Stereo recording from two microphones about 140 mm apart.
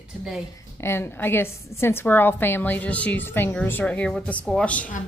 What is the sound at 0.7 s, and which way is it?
A woman's voice, 15° left (ahead or behind).